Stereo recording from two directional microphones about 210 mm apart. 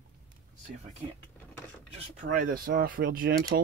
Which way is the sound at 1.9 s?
40° right (ahead or behind).